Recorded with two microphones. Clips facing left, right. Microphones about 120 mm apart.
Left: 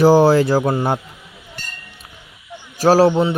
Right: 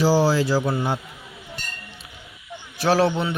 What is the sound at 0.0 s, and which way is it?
Music, 55° left (ahead or behind).